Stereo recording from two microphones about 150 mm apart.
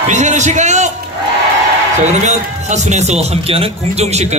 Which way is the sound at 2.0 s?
50° right (ahead or behind).